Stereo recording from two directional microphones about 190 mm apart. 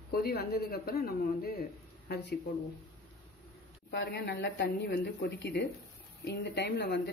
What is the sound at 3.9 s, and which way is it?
Speech, 60° left (ahead or behind).